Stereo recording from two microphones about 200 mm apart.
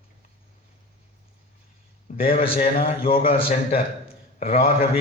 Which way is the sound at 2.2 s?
30° left (ahead or behind).